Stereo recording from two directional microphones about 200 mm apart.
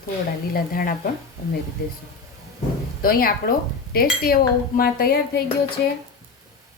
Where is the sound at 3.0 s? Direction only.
45° left (ahead or behind).